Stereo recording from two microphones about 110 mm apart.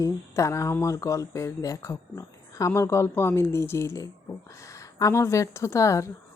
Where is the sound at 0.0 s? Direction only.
30° left (ahead or behind).